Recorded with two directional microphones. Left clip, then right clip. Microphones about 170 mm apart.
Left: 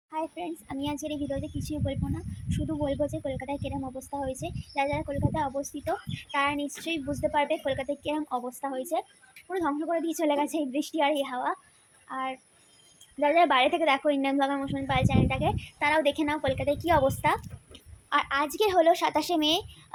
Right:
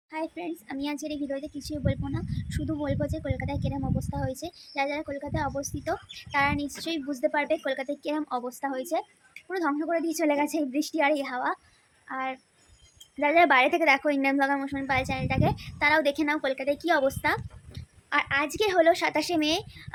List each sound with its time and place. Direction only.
0.1 s a woman's voice: 10° right (ahead or behind)